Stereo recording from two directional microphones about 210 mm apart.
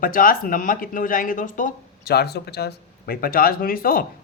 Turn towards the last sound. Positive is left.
turn(degrees=45)  # may be behind; listen again after turning